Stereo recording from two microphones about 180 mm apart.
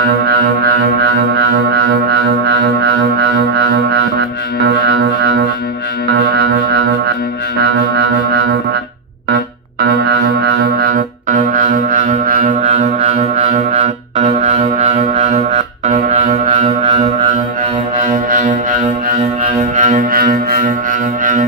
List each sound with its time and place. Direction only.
0.3 s music: 60° right (ahead or behind)
9.8 s music: 65° right (ahead or behind); by 12.7 s 50° right (ahead or behind)
12.7 s music: 35° right (ahead or behind)